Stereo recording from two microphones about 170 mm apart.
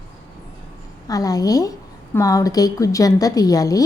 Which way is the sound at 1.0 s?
20° left (ahead or behind).